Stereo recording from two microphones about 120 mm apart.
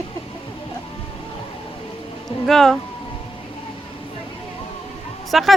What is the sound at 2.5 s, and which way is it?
Speech, 5° left (ahead or behind).